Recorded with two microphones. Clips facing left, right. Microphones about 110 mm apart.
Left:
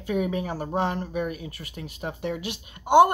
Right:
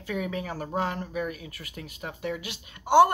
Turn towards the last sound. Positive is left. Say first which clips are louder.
# left 2 dB
turn(degrees=15)  # may be behind; listen again after turning